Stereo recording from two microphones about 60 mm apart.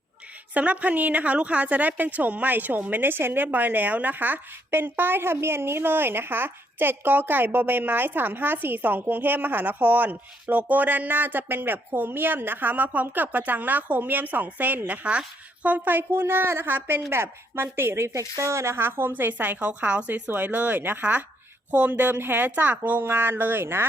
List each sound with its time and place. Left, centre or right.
0.5 s a woman's voice: right